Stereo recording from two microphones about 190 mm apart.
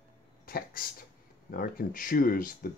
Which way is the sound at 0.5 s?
50° left (ahead or behind).